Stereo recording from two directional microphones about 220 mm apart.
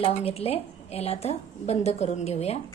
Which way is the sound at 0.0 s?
25° left (ahead or behind).